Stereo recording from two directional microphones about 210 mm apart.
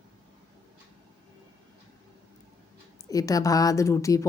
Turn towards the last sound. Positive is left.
turn(degrees=15)  # may be behind; listen again after turning